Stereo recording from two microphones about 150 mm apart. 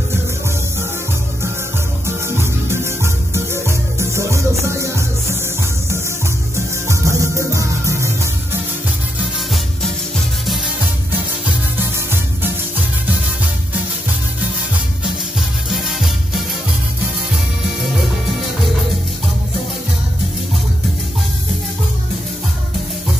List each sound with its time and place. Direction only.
2.0 s music: 15° right (ahead or behind)
6.5 s music: 20° right (ahead or behind)